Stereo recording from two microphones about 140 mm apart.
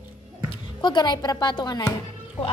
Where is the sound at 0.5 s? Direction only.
30° left (ahead or behind).